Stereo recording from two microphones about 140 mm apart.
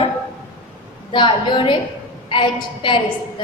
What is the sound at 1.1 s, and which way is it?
A woman's voice, 35° left (ahead or behind).